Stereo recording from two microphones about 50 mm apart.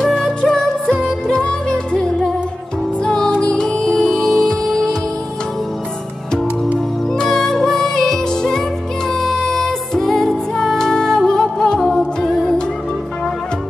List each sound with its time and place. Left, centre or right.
0.5 s music: centre
7.1 s music: centre